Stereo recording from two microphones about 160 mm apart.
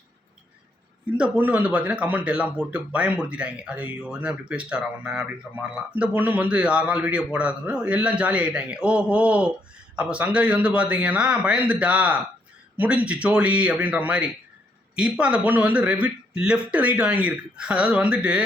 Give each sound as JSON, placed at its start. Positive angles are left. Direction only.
{"t": 1.1, "sound": "speech", "side_deg": -5}